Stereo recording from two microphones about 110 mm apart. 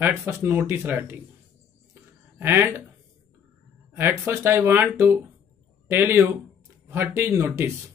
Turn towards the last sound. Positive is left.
turn(degrees=-25)  # may be behind; listen again after turning